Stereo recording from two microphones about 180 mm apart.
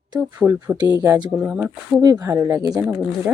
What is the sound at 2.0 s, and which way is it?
Speech, 20° right (ahead or behind).